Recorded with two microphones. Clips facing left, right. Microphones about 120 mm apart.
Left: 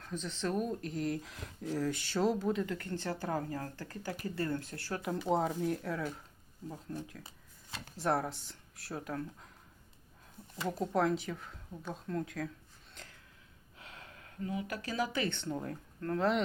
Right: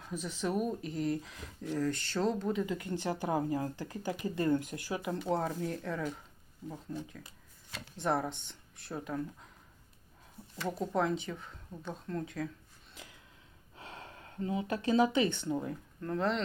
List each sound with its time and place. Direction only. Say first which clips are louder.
0.0 s speech: right 1 dB; 10° right (ahead or behind)
2.7 s speech: right 3 dB; 15° right (ahead or behind)
5.3 s speech: left 2 dB; 10° left (ahead or behind)
10.8 s speech: left 1 dB; centre (ahead or behind)
12.9 s sniff: right 1 dB; 5° right (ahead or behind)
13.7 s a sound: right 5 dB; 30° right (ahead or behind)
15.4 s speech: right 3 dB; 5° right (ahead or behind)